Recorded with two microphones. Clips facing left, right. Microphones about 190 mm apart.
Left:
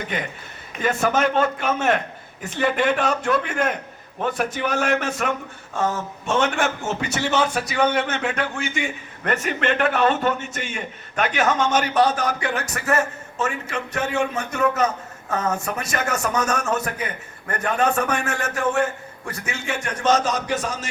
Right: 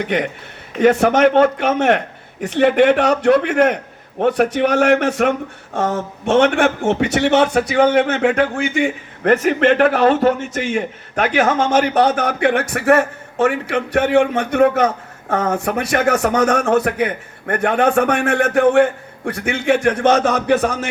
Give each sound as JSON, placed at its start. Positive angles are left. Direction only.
{"t": 0.0, "sound": "a man's voice", "side_deg": -70}
{"t": 10.8, "sound": "a man's voice", "side_deg": -60}